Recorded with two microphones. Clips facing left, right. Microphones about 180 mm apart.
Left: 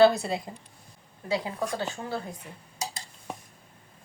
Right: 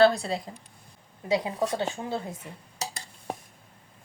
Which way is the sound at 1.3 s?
25° right (ahead or behind).